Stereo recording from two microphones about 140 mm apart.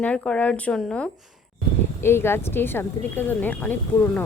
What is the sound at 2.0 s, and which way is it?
Speech, 15° left (ahead or behind).